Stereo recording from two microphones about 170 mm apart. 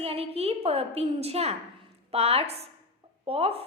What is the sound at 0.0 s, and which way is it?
A woman's voice, 35° right (ahead or behind).